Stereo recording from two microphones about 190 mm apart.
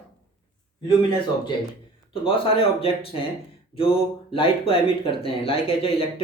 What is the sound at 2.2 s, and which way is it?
Speech, 30° left (ahead or behind).